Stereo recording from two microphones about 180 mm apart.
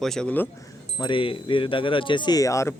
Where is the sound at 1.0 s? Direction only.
30° left (ahead or behind).